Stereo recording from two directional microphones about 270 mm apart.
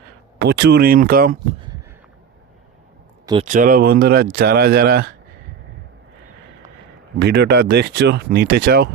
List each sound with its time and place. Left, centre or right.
0.3 s speech: right
3.4 s speech: right
7.2 s speech: right